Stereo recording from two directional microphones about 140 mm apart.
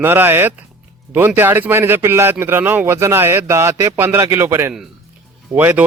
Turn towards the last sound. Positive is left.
turn(degrees=-15)  # may be behind; listen again after turning